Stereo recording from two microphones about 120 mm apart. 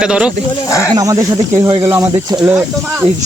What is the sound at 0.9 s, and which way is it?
Speech, 30° right (ahead or behind).